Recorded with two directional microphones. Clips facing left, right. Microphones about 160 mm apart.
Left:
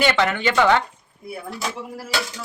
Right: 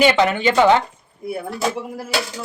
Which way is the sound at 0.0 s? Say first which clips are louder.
Right 4 dB; 15° right (ahead or behind).